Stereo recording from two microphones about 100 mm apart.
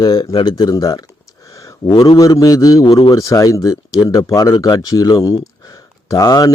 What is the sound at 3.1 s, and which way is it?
A man's voice, 35° left (ahead or behind).